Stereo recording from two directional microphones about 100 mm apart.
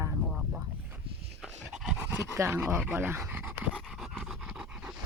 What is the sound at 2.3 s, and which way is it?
Speech, 25° right (ahead or behind).